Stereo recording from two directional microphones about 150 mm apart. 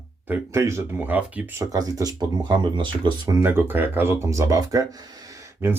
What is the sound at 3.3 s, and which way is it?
Speech, 15° right (ahead or behind).